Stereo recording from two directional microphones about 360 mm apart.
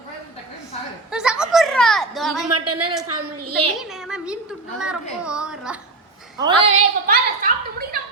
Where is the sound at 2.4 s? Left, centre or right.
Right.